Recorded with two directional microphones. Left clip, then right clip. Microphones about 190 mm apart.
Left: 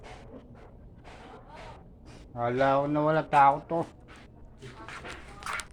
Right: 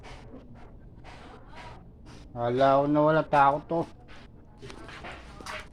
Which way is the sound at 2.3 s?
10° right (ahead or behind).